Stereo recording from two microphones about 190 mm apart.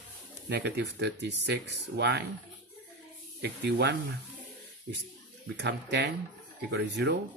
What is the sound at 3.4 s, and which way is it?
Speech, 60° right (ahead or behind).